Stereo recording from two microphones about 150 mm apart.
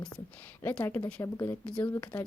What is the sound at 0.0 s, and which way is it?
A woman's voice, 10° left (ahead or behind).